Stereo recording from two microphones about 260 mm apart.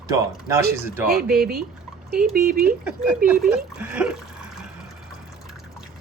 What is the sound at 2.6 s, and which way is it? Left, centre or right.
Speech, centre.